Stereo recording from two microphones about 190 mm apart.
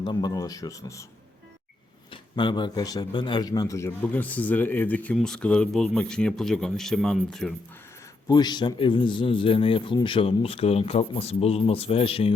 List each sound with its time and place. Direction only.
0.0 s a man's voice: 20° left (ahead or behind)
2.0 s speech: 25° left (ahead or behind); by 7.5 s 5° left (ahead or behind)
8.3 s a man's voice: 20° left (ahead or behind)